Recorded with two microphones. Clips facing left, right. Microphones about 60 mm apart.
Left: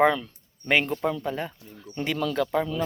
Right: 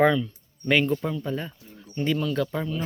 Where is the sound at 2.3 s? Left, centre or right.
Left.